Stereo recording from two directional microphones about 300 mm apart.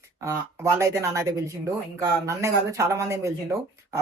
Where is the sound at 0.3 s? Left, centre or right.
Centre.